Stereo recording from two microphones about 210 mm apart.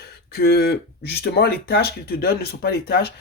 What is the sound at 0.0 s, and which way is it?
Speech, 45° left (ahead or behind).